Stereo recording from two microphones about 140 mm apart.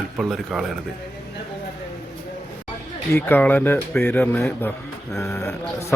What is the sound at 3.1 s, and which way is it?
Speech, 15° left (ahead or behind).